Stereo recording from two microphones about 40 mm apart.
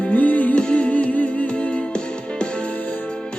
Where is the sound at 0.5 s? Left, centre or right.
Left.